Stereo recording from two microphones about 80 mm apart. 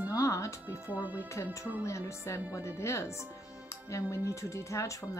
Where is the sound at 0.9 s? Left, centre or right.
Right.